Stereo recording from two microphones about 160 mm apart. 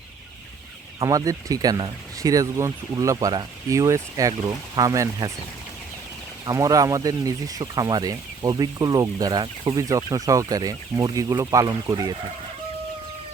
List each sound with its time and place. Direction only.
1.0 s speech: 20° right (ahead or behind)
6.4 s speech: 20° right (ahead or behind)